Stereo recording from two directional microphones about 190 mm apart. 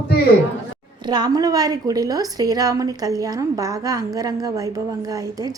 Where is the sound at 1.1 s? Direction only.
20° right (ahead or behind).